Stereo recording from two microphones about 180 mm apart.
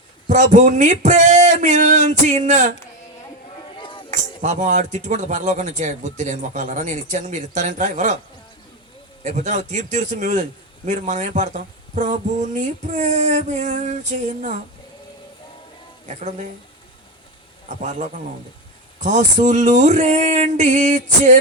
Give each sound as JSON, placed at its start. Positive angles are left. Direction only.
{"t": 0.3, "sound": "speech", "side_deg": -40}
{"t": 3.8, "sound": "music", "side_deg": 30}
{"t": 4.1, "sound": "speech", "side_deg": -45}
{"t": 9.2, "sound": "speech", "side_deg": -40}
{"t": 16.0, "sound": "speech", "side_deg": -40}
{"t": 17.7, "sound": "speech", "side_deg": -40}
{"t": 18.9, "sound": "speech", "side_deg": -40}